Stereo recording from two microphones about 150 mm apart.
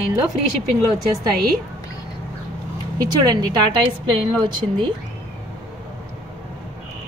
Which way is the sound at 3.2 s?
30° right (ahead or behind).